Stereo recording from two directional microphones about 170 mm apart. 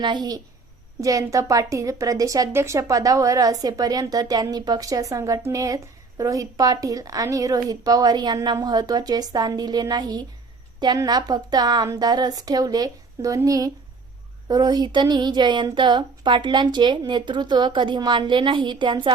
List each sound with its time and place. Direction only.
0.0 s a woman's voice: 25° right (ahead or behind)